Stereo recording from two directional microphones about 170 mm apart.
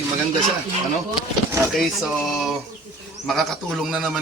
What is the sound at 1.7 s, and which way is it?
Speech, centre (ahead or behind).